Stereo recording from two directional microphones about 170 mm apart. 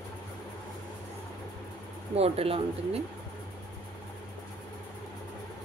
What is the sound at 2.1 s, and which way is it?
Speech, 35° right (ahead or behind).